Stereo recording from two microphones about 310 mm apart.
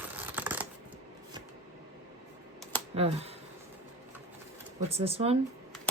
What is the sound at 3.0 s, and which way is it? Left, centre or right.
Speech, centre.